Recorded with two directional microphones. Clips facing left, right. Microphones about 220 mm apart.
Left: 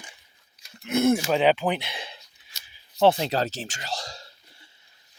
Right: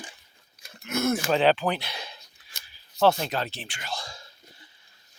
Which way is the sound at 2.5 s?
50° right (ahead or behind).